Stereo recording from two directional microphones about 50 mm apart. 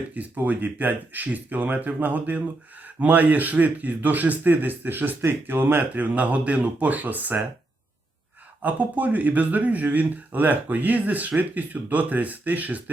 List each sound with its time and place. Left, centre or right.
0.1 s speech: right
8.6 s speech: right